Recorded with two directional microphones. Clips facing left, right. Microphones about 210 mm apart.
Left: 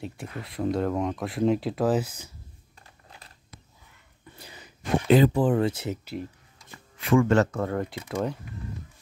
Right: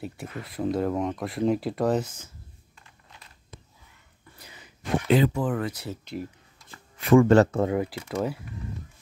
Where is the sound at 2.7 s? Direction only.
35° left (ahead or behind).